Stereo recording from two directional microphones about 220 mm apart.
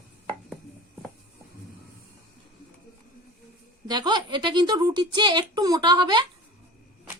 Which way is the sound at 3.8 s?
20° right (ahead or behind).